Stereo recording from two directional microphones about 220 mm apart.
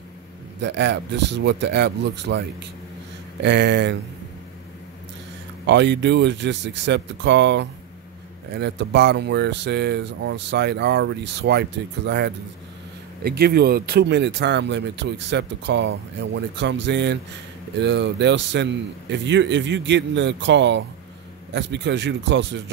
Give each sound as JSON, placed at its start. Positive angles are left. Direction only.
{"t": 0.6, "sound": "speech", "side_deg": -50}
{"t": 3.4, "sound": "speech", "side_deg": -55}
{"t": 5.7, "sound": "speech", "side_deg": -55}
{"t": 13.2, "sound": "speech", "side_deg": -45}